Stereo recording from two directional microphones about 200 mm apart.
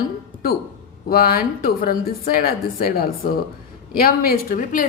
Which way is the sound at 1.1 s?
45° left (ahead or behind).